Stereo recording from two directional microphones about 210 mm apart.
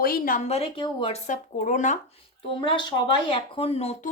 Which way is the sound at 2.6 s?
25° left (ahead or behind).